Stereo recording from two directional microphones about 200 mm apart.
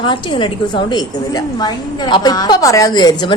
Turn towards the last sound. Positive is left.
turn(degrees=20)  # may be behind; listen again after turning